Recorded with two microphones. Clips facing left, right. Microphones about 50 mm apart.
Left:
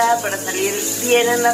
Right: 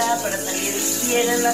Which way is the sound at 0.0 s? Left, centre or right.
Left.